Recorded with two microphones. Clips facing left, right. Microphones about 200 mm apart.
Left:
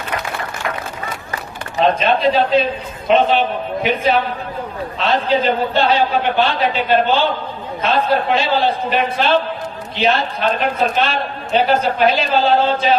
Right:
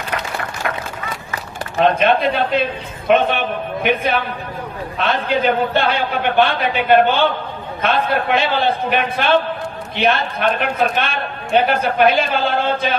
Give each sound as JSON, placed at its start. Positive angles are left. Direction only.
{"t": 2.0, "sound": "a man's voice", "side_deg": -55}